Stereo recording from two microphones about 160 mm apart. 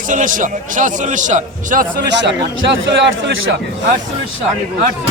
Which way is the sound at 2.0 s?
90° right.